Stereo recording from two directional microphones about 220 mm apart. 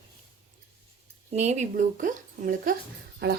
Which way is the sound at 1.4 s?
30° right (ahead or behind).